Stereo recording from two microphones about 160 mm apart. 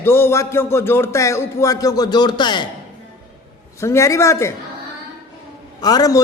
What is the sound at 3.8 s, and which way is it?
Speech, 20° left (ahead or behind).